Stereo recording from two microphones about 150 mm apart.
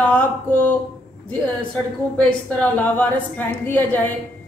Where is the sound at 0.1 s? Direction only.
10° left (ahead or behind).